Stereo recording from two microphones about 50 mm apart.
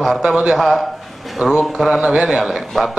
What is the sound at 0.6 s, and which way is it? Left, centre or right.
A man's voice, centre.